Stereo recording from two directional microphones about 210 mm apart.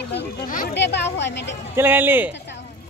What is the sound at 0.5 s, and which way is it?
Speech, 40° left (ahead or behind).